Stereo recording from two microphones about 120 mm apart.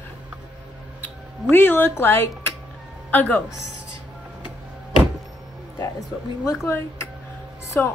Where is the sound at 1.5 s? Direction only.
15° left (ahead or behind).